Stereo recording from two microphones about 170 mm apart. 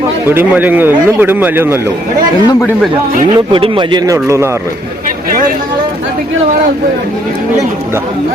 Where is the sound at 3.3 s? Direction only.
30° right (ahead or behind).